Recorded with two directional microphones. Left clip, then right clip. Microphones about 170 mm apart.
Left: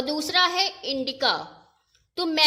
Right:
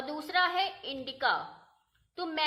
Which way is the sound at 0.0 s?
40° left (ahead or behind).